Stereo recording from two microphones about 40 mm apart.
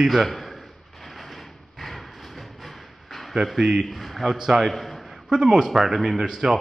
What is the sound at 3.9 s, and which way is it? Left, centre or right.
A man's voice, centre.